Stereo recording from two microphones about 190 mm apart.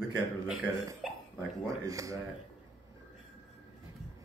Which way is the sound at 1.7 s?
15° right (ahead or behind).